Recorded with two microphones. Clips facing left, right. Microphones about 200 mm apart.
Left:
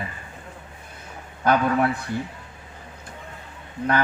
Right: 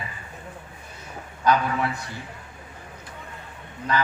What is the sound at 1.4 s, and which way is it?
Speech, 55° left (ahead or behind).